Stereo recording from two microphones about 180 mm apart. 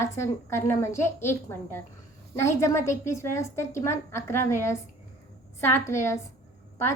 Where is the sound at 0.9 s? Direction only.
15° left (ahead or behind).